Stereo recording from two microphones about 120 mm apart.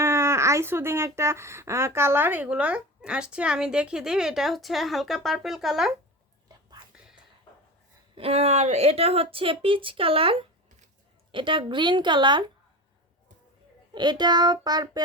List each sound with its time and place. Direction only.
0.0 s speech: 25° right (ahead or behind); by 5.9 s 5° right (ahead or behind)
8.1 s a woman's voice: 55° right (ahead or behind); by 12.5 s 40° right (ahead or behind)
13.9 s speech: 40° right (ahead or behind)